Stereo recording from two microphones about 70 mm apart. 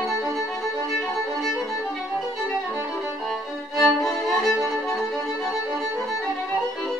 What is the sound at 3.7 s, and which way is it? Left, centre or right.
Music, centre.